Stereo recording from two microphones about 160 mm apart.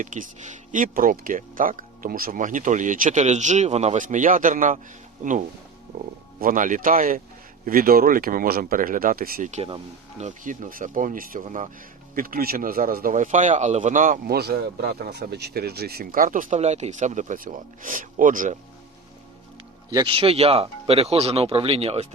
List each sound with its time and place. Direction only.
0.0 s speech: 55° right (ahead or behind)
12.1 s speech: 65° right (ahead or behind)
19.9 s speech: 30° right (ahead or behind)